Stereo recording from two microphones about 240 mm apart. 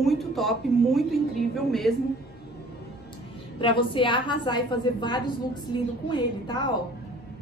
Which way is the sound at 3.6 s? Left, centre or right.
Left.